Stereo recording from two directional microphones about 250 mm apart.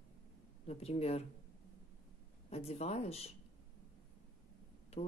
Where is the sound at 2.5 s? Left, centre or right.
Left.